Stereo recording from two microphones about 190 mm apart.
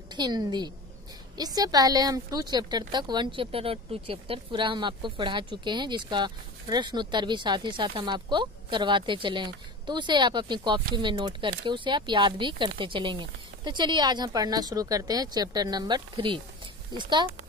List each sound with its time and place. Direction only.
0.1 s speech: 20° right (ahead or behind)